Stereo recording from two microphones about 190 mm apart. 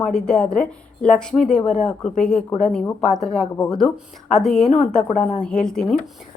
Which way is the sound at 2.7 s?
Centre (ahead or behind).